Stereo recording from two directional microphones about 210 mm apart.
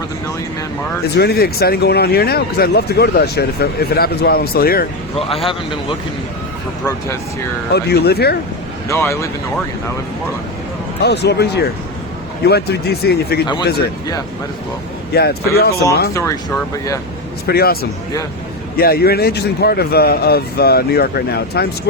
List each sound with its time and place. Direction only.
1.1 s speech: 50° left (ahead or behind)
7.7 s speech: 50° left (ahead or behind)
8.9 s speech: 15° left (ahead or behind)
11.0 s speech: 55° left (ahead or behind)
15.1 s speech: 50° left (ahead or behind)
16.1 s speech: 15° left (ahead or behind)
17.4 s speech: 50° left (ahead or behind)
18.8 s speech: 45° left (ahead or behind)